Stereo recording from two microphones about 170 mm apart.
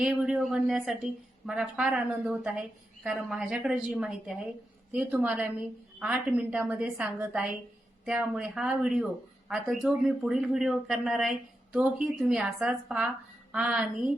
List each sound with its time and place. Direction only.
0.0 s a woman's voice: 5° right (ahead or behind)